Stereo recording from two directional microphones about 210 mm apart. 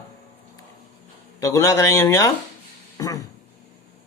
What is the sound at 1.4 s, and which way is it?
Speech, 15° left (ahead or behind).